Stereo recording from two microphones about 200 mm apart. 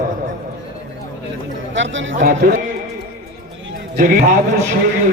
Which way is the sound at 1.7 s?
70° right (ahead or behind).